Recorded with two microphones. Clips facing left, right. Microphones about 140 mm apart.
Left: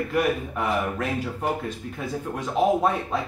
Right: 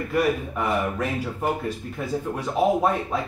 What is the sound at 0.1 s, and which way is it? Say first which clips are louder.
Speech: right 3 dB; centre (ahead or behind).